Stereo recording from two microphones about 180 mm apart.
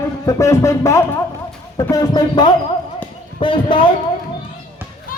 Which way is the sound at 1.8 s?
20° left (ahead or behind).